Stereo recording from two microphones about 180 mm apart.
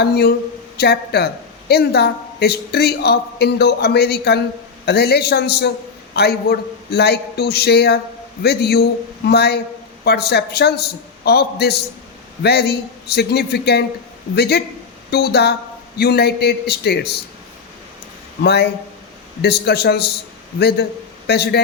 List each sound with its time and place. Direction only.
0.0 s a woman's voice: 60° left (ahead or behind)
18.4 s a woman's voice: 65° left (ahead or behind)